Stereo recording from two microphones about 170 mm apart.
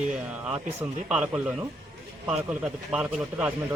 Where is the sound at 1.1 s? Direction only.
5° right (ahead or behind).